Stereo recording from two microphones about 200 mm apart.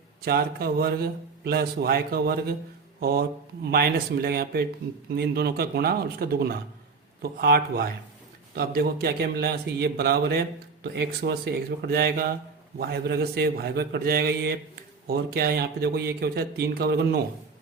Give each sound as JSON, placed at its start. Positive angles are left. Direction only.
{"t": 0.3, "sound": "a man's voice", "side_deg": -50}